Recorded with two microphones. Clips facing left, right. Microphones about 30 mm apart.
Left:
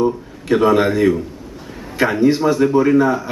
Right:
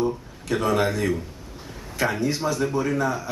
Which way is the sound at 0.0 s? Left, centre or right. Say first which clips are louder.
Left 7 dB; left.